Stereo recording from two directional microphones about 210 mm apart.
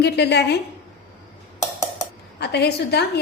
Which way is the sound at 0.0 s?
55° left (ahead or behind).